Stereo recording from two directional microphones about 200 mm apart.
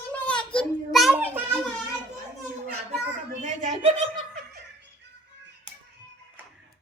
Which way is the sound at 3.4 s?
35° right (ahead or behind).